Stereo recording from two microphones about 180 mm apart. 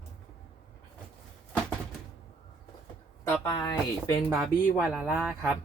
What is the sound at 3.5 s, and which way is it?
Speech, 20° left (ahead or behind).